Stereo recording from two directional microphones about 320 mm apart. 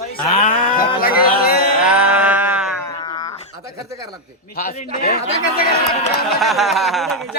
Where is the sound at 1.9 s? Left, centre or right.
Centre.